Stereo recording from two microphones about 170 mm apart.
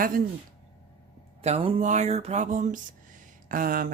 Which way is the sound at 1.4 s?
35° right (ahead or behind).